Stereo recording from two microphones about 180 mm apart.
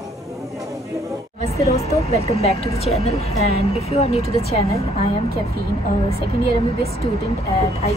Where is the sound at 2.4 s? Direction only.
35° left (ahead or behind).